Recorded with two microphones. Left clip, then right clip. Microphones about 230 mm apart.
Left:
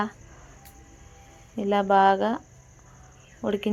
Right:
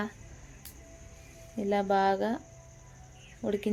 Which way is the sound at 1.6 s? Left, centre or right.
Centre.